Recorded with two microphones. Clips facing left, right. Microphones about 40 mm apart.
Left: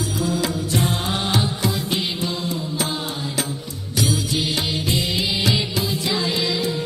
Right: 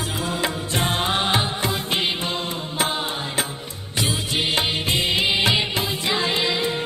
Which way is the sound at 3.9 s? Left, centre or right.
Right.